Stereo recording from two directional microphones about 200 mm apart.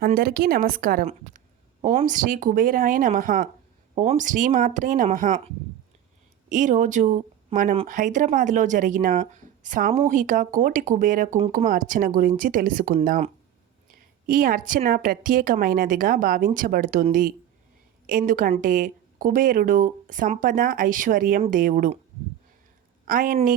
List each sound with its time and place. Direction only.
0.0 s speech: 45° right (ahead or behind)
6.5 s speech: 40° right (ahead or behind)
14.3 s a woman's voice: 45° right (ahead or behind)
23.0 s speech: 45° right (ahead or behind)